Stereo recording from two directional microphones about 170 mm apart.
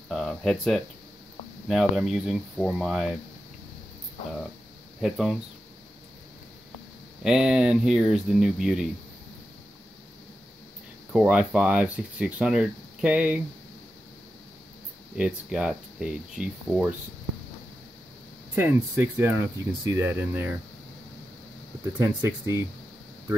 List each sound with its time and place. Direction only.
0.1 s speech: centre (ahead or behind)
5.0 s speech: centre (ahead or behind)
7.2 s speech: 5° right (ahead or behind)
11.1 s speech: 5° right (ahead or behind)
15.1 s speech: 5° right (ahead or behind)
18.5 s speech: 10° right (ahead or behind)
21.9 s speech: 20° right (ahead or behind)